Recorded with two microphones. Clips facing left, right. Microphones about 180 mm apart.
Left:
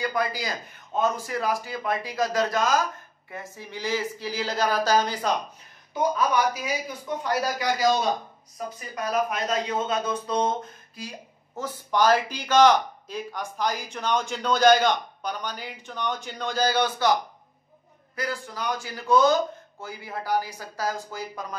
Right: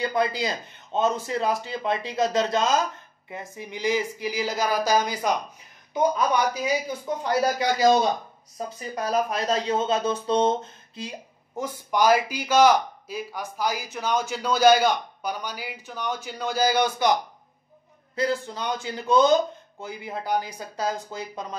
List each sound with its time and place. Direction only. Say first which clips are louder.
0.0 s speech: right 3 dB; 25° right (ahead or behind)
11.5 s speech: even; 15° right (ahead or behind)